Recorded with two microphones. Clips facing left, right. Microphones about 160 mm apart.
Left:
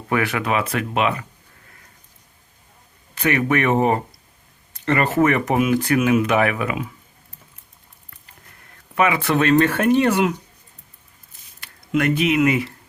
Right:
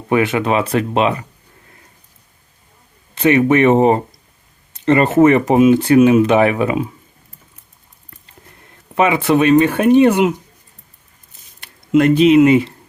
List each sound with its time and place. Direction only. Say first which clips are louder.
0.1 s speech: right 6 dB; 20° right (ahead or behind)
3.2 s speech: right 8 dB; 25° right (ahead or behind)
9.0 s speech: right 5 dB; 20° right (ahead or behind)
11.6 s speech: right 8 dB; 25° right (ahead or behind)